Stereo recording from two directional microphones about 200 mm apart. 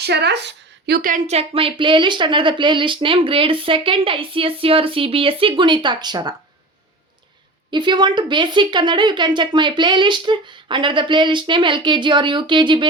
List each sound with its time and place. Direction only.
0.0 s a woman's voice: 55° right (ahead or behind); by 6.3 s 20° right (ahead or behind)
7.7 s a woman's voice: 25° right (ahead or behind)